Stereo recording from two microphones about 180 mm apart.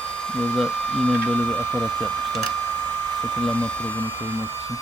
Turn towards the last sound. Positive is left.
turn(degrees=5)  # may be behind; listen again after turning